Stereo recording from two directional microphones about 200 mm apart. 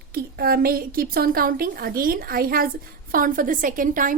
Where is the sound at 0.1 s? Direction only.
50° right (ahead or behind).